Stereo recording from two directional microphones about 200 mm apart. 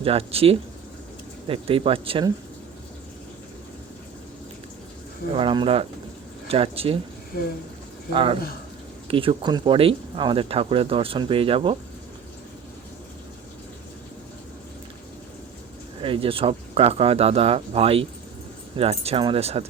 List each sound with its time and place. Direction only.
0.0 s speech: 30° right (ahead or behind)
5.3 s speech: 25° right (ahead or behind)
7.3 s speech: 50° left (ahead or behind)
8.1 s speech: 25° right (ahead or behind)
16.0 s speech: 25° right (ahead or behind)